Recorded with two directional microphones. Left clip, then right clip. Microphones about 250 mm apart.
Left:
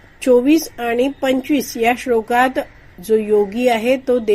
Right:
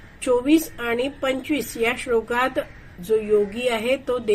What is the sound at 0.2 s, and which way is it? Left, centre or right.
A woman's voice, left.